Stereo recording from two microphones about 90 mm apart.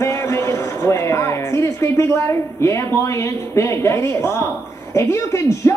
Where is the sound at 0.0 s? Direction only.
30° left (ahead or behind).